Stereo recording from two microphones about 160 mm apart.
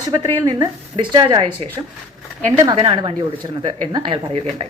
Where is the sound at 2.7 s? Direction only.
30° right (ahead or behind).